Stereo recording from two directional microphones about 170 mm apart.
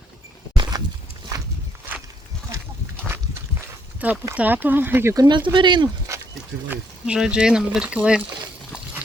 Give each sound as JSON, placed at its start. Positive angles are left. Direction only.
{"t": 0.5, "sound": "a sound", "side_deg": -25}
{"t": 4.0, "sound": "speech", "side_deg": -10}
{"t": 6.7, "sound": "speech", "side_deg": -5}